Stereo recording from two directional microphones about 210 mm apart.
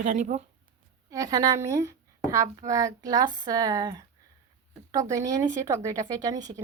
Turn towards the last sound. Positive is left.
turn(degrees=-15)  # may be behind; listen again after turning